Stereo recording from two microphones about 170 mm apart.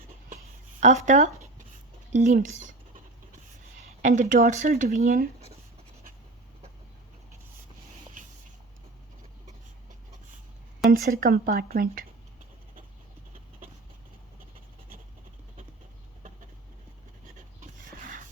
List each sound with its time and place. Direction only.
1.0 s a sound: 45° right (ahead or behind)
2.1 s speech: 45° right (ahead or behind)
10.8 s a woman's voice: 60° right (ahead or behind)
17.2 s rub: 50° right (ahead or behind)